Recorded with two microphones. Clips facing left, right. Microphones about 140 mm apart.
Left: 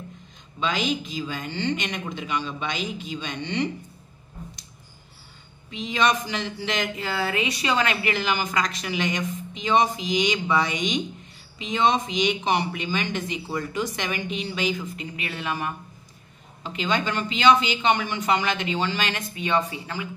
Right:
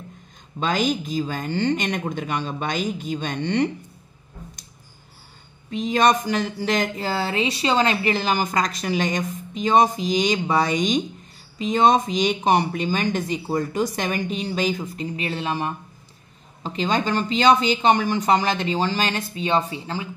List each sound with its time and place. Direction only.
0.6 s speech: 45° right (ahead or behind)
5.7 s speech: 45° right (ahead or behind)